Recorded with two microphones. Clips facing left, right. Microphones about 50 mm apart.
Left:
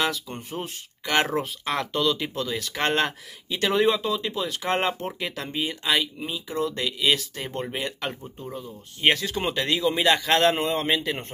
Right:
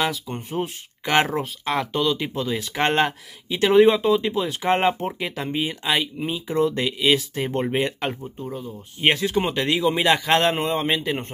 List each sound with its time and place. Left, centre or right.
0.0 s speech: centre
1.0 s speech: centre
1.3 s speech: centre
6.2 s speech: right
8.1 s speech: centre
9.1 s speech: centre